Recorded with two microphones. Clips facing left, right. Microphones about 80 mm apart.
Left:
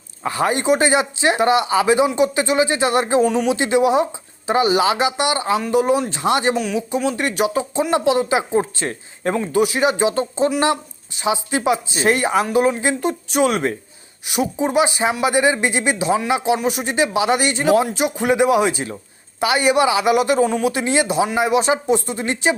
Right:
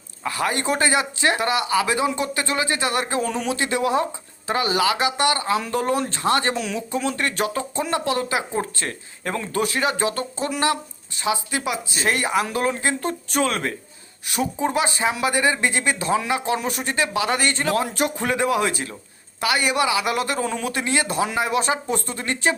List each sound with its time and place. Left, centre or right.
0.2 s speech: left
3.2 s speech: centre
6.6 s speech: centre; by 12.5 s left
12.5 s speech: centre